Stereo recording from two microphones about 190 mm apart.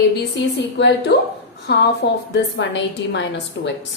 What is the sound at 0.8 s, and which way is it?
A woman's voice, 65° left (ahead or behind).